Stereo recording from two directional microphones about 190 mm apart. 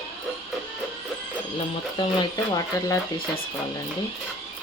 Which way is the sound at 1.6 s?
25° left (ahead or behind).